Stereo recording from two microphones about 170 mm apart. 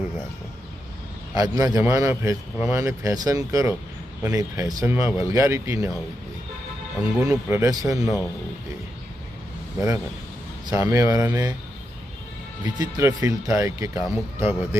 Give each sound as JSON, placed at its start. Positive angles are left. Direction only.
{"t": 1.4, "sound": "speech", "side_deg": -20}
{"t": 7.2, "sound": "speech", "side_deg": -10}
{"t": 8.0, "sound": "speech", "side_deg": 0}
{"t": 10.7, "sound": "speech", "side_deg": -20}
{"t": 12.6, "sound": "speech", "side_deg": -25}